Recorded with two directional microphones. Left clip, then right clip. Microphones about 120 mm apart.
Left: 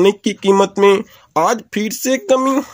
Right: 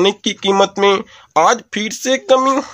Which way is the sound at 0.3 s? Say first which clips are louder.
Even; 20° left (ahead or behind).